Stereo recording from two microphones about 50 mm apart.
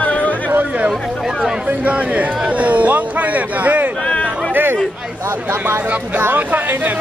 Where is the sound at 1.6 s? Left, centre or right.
Right.